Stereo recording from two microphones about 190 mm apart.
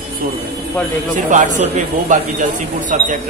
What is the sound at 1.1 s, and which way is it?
A man's voice, 40° right (ahead or behind).